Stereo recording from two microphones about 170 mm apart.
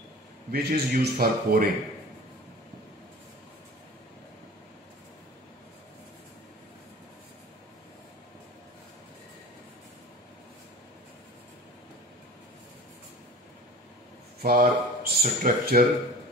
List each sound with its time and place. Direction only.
0.5 s a man's voice: 65° right (ahead or behind)
14.4 s speech: 60° right (ahead or behind)